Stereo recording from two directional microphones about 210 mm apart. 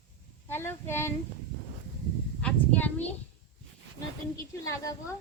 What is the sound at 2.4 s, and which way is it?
Speech, 5° left (ahead or behind).